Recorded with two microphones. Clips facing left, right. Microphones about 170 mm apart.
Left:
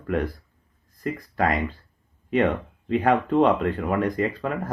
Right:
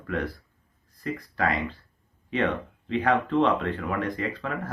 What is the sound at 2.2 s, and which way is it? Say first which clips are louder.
Speech: left 5 dB; 45° left (ahead or behind).